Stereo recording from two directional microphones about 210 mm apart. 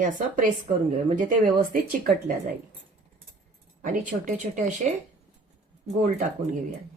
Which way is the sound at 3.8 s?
40° right (ahead or behind).